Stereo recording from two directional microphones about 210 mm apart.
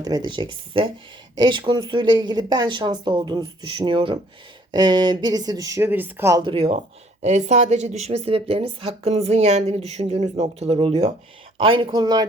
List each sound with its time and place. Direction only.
0.0 s speech: 20° right (ahead or behind)